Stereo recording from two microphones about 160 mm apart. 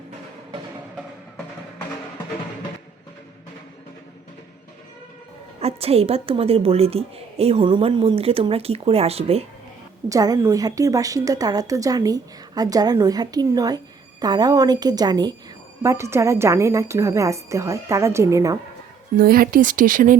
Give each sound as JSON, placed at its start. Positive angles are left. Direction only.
{"t": 5.5, "sound": "a woman's voice", "side_deg": -40}
{"t": 10.1, "sound": "a woman's voice", "side_deg": -20}
{"t": 19.1, "sound": "speech", "side_deg": -65}